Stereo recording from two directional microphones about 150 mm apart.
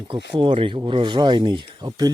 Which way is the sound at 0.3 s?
35° right (ahead or behind).